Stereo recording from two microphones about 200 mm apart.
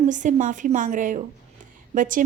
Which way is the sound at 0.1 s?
40° right (ahead or behind).